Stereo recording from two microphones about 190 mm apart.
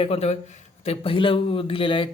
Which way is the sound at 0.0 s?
30° left (ahead or behind).